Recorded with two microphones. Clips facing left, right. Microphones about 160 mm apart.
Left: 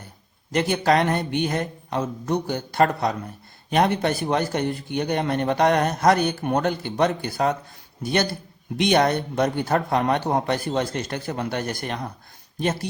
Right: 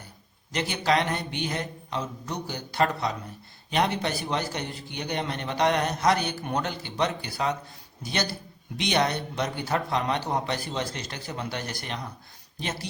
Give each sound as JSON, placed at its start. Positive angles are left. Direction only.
{"t": 0.5, "sound": "a man's voice", "side_deg": 50}